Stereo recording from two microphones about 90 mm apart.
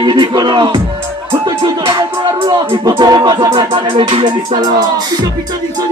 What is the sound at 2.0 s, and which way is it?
Music, 50° right (ahead or behind).